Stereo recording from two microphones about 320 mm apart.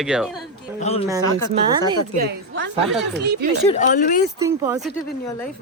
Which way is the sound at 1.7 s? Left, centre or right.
Centre.